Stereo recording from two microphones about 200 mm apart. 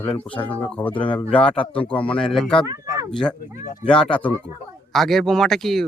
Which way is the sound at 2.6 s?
15° right (ahead or behind).